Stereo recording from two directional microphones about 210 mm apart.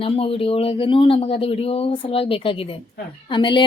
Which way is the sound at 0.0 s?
25° left (ahead or behind).